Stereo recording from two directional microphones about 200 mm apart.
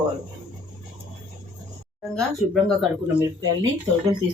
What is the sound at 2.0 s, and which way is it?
Speech, centre (ahead or behind).